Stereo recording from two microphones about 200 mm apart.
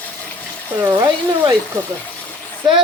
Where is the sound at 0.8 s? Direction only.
15° right (ahead or behind).